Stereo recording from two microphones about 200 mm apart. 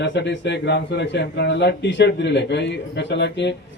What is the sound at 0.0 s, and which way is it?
Speech, 60° left (ahead or behind).